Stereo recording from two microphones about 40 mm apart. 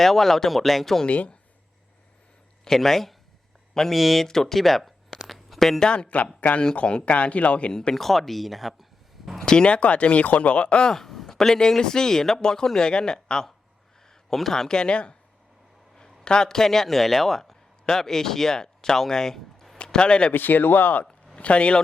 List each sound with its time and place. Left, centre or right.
0.0 s speech: centre
1.0 s speech: left
2.6 s speech: centre
5.8 s speech: left
6.4 s speech: left
7.7 s speech: centre
7.9 s speech: centre
9.4 s speech: centre
10.9 s speech: centre
14.3 s speech: centre; by 15.1 s left
16.2 s speech: centre
19.9 s speech: left
20.3 s speech: left
21.3 s speech: left